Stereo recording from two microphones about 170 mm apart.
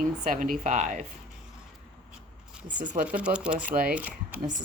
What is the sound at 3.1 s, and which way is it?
Speech, 5° right (ahead or behind).